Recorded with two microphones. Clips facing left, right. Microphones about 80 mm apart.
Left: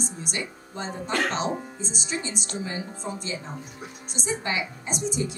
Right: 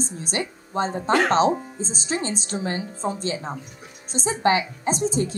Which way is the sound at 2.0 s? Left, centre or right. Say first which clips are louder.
Right 6 dB; right.